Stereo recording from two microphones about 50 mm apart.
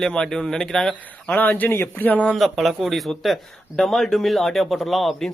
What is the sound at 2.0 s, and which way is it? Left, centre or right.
Speech, left.